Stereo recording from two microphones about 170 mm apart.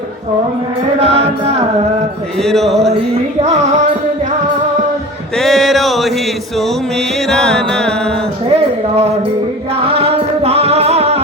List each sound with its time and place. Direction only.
0.9 s music: 40° right (ahead or behind)
2.4 s speech: centre (ahead or behind)
3.4 s music: 40° right (ahead or behind)
5.4 s a sound: centre (ahead or behind)
7.3 s music: 5° left (ahead or behind)
8.4 s a sound: 40° right (ahead or behind)
9.8 s music: 35° right (ahead or behind)